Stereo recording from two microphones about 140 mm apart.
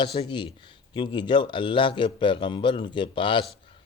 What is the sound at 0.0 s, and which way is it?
Speech, 40° left (ahead or behind).